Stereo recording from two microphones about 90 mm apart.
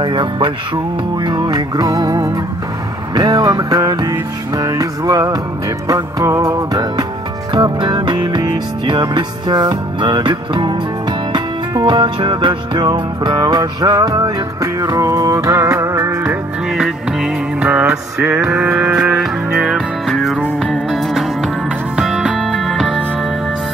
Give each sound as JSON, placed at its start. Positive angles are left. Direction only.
{"t": 0.0, "sound": "music", "side_deg": -60}
{"t": 7.5, "sound": "music", "side_deg": -55}
{"t": 11.8, "sound": "music", "side_deg": -60}
{"t": 16.7, "sound": "music", "side_deg": -5}
{"t": 17.6, "sound": "a sound", "side_deg": -15}
{"t": 19.1, "sound": "music", "side_deg": -5}